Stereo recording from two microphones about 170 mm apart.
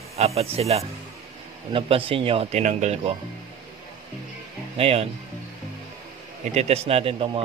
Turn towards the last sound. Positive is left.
turn(degrees=-30)  # may be behind; listen again after turning